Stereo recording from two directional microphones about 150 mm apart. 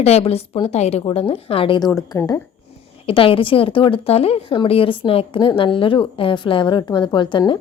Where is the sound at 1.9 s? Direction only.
20° left (ahead or behind).